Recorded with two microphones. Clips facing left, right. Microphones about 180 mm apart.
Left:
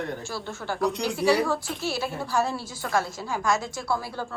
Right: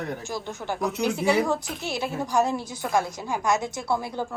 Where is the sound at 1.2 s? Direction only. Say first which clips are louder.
Left 2 dB; 20° right (ahead or behind).